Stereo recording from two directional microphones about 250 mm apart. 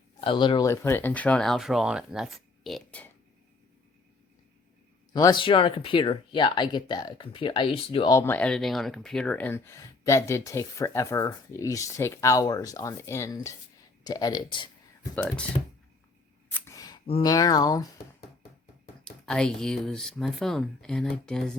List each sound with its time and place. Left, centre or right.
0.2 s speech: centre
5.1 s speech: centre
15.1 s speech: centre
16.5 s a sound: centre
19.0 s speech: centre